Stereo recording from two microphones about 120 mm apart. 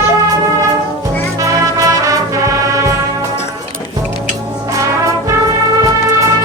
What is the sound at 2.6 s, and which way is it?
Music, 25° right (ahead or behind).